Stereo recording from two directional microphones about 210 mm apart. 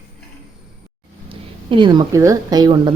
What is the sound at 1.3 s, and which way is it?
Speech, 25° right (ahead or behind).